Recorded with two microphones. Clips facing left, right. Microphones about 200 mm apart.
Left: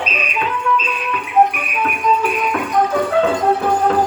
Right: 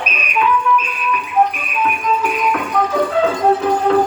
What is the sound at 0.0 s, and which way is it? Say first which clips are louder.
Music: right 3 dB; 30° left (ahead or behind).